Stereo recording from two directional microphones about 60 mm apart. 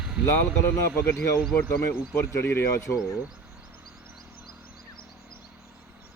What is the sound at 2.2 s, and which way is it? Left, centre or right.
Speech, left.